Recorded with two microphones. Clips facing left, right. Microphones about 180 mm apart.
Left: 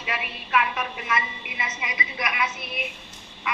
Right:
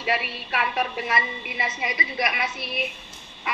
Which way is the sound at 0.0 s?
35° right (ahead or behind).